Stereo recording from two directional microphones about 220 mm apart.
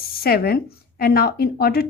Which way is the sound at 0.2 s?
45° left (ahead or behind).